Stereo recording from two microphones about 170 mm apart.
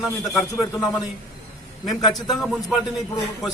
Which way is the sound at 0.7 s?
20° left (ahead or behind).